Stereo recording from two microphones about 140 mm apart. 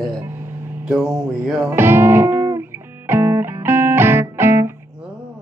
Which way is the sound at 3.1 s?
15° right (ahead or behind).